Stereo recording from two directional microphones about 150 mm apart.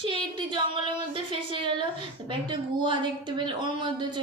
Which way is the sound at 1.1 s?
35° right (ahead or behind).